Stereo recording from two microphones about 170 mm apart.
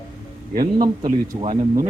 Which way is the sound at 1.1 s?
40° right (ahead or behind).